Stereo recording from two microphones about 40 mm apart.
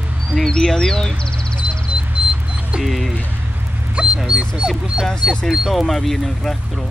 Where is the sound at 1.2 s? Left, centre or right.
Left.